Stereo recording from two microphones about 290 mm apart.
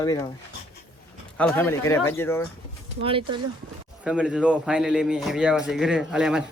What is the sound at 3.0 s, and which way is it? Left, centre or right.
Speech, centre.